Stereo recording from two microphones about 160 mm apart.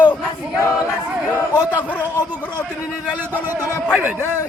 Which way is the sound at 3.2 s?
10° right (ahead or behind).